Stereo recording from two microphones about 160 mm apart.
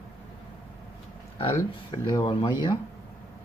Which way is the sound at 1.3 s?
35° left (ahead or behind).